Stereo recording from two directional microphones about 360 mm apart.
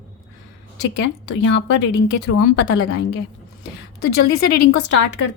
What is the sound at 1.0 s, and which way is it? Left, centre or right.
A woman's voice, left.